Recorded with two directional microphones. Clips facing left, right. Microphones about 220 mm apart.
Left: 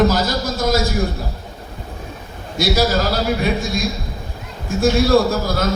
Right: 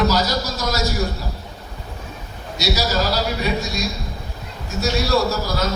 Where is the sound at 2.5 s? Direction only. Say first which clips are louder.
Left 4 dB; 50° left (ahead or behind).